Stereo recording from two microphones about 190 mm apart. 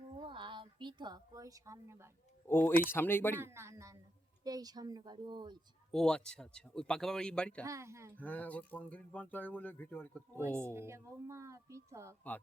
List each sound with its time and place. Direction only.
0.2 s a sound: 25° right (ahead or behind)
2.5 s speech: 10° left (ahead or behind)
3.4 s a woman's voice: 15° right (ahead or behind)
5.9 s speech: 5° left (ahead or behind)
7.6 s a woman's voice: 15° right (ahead or behind)
8.1 s speech: 10° left (ahead or behind)
10.6 s a woman's voice: 15° right (ahead or behind)